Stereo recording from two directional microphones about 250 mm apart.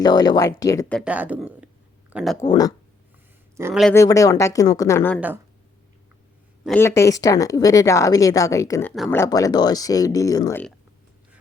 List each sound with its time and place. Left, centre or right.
0.0 s a woman's voice: centre
0.9 s speech: centre
2.4 s a woman's voice: centre
3.6 s speech: centre
3.8 s a woman's voice: centre
6.7 s a woman's voice: centre